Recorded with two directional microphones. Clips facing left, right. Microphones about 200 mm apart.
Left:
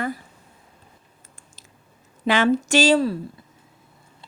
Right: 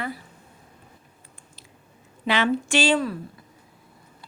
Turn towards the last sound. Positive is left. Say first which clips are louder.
# left 4 dB
turn(degrees=30)  # may be behind; listen again after turning